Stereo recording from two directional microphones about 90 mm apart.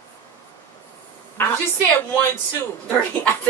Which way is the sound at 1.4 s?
20° left (ahead or behind).